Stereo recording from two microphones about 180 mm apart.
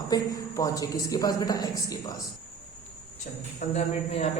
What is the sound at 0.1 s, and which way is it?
A woman's voice, 20° left (ahead or behind).